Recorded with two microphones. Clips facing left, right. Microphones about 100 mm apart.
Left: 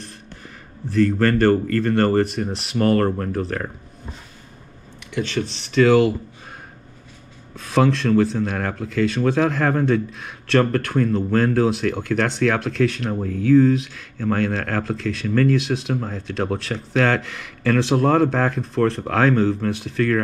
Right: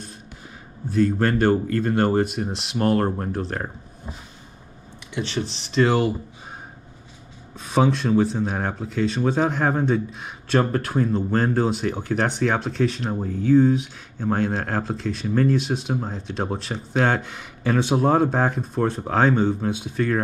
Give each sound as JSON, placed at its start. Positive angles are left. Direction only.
{"t": 1.0, "sound": "speech", "side_deg": -15}
{"t": 3.3, "sound": "speech", "side_deg": -5}
{"t": 5.1, "sound": "speech", "side_deg": -5}
{"t": 7.5, "sound": "speech", "side_deg": -5}
{"t": 13.3, "sound": "speech", "side_deg": 90}
{"t": 14.2, "sound": "speech", "side_deg": -15}
{"t": 19.7, "sound": "speech", "side_deg": 75}